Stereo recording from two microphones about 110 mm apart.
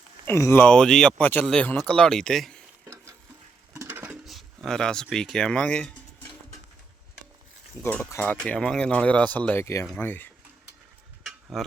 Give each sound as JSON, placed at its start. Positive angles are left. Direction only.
{"t": 0.3, "sound": "speech", "side_deg": 25}
{"t": 0.7, "sound": "speech", "side_deg": 5}
{"t": 3.8, "sound": "a sound", "side_deg": -15}
{"t": 4.1, "sound": "a sound", "side_deg": 0}
{"t": 5.0, "sound": "speech", "side_deg": 5}
{"t": 7.8, "sound": "speech", "side_deg": 10}
{"t": 11.5, "sound": "speech", "side_deg": 0}